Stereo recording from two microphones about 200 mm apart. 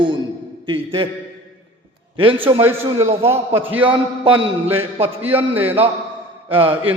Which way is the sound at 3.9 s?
25° right (ahead or behind).